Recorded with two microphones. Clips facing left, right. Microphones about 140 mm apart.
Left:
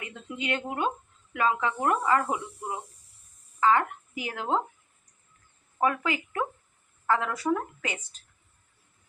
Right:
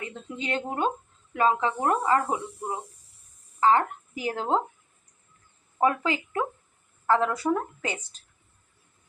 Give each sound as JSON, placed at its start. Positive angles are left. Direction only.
{"t": 0.0, "sound": "speech", "side_deg": -30}
{"t": 5.8, "sound": "speech", "side_deg": -30}